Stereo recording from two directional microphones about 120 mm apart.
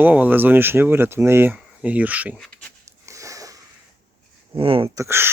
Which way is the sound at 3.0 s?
25° right (ahead or behind).